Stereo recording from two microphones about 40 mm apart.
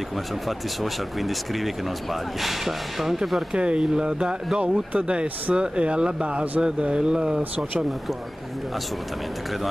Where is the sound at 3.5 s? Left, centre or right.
Right.